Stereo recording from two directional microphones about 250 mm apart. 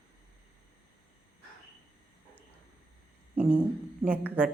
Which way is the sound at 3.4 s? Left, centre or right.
Centre.